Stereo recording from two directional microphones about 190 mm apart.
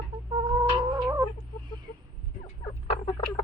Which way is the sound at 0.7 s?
25° right (ahead or behind).